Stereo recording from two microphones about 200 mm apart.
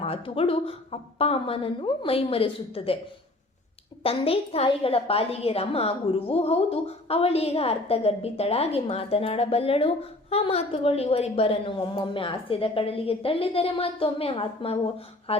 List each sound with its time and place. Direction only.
0.0 s a woman's voice: 30° left (ahead or behind)
4.0 s a woman's voice: 30° left (ahead or behind)